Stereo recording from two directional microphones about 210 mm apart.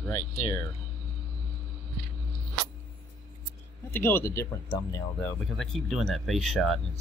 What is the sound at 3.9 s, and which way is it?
Speech, 10° left (ahead or behind).